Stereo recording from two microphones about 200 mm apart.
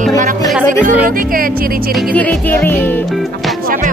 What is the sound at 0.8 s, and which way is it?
Speech, 45° right (ahead or behind).